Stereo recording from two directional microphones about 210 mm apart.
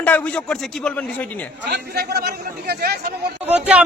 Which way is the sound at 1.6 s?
50° right (ahead or behind).